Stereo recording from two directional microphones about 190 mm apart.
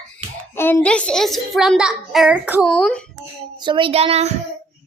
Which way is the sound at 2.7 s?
5° left (ahead or behind).